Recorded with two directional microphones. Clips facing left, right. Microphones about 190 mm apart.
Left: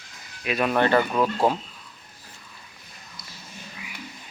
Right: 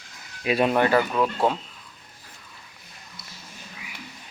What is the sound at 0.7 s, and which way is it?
Speech, 10° right (ahead or behind).